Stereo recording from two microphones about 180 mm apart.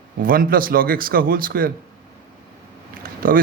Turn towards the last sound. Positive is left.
turn(degrees=-50)  # may be behind; listen again after turning